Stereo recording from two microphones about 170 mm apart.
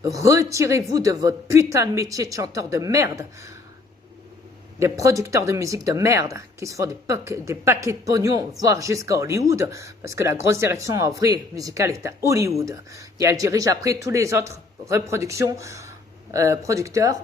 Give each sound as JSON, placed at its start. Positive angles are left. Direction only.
{"t": 0.1, "sound": "a woman's voice", "side_deg": -20}
{"t": 4.8, "sound": "speech", "side_deg": -20}